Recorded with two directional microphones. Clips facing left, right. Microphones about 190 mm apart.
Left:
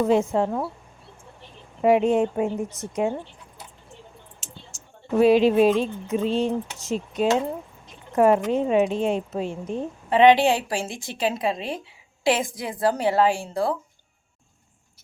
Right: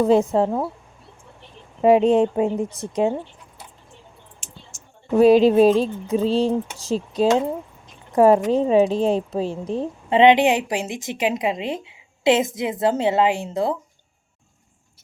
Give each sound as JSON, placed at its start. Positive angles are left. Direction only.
{"t": 0.0, "sound": "speech", "side_deg": -35}
{"t": 1.8, "sound": "a woman's voice", "side_deg": -25}
{"t": 5.2, "sound": "speech", "side_deg": -40}
{"t": 10.1, "sound": "a woman's voice", "side_deg": -20}